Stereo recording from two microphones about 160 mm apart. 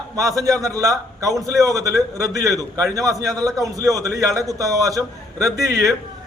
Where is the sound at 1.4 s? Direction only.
20° right (ahead or behind).